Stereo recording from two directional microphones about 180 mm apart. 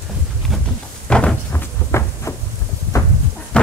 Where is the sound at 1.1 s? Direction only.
5° left (ahead or behind).